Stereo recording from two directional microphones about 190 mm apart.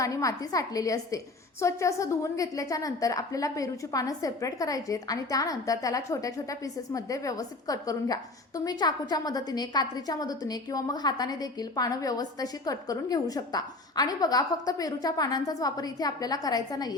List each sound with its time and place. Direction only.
0.0 s a woman's voice: 15° left (ahead or behind)